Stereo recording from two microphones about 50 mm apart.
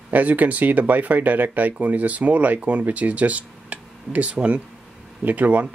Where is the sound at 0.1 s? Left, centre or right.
Right.